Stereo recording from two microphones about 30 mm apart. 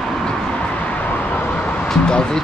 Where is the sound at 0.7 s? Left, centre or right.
Left.